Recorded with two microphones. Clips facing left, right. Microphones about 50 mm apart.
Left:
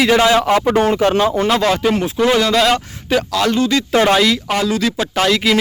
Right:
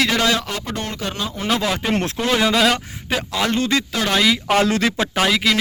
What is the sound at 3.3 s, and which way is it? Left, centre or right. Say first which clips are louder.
Speech: left 2 dB; right.